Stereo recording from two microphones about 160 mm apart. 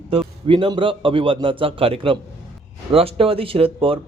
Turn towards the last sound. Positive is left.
turn(degrees=-35)  # may be behind; listen again after turning